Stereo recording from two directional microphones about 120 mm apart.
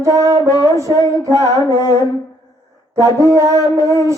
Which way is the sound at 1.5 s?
35° left (ahead or behind).